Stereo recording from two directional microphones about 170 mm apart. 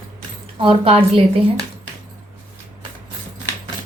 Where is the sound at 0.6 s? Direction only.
35° right (ahead or behind).